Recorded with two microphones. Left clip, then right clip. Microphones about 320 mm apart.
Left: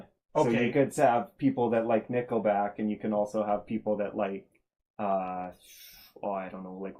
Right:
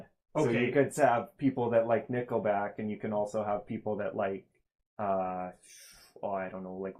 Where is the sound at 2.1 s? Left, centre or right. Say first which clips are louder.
Left 3 dB; right.